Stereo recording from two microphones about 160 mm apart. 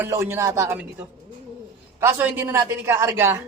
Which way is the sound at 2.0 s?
15° right (ahead or behind).